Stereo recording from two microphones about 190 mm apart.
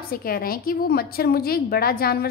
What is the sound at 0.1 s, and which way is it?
A woman's voice, 50° left (ahead or behind).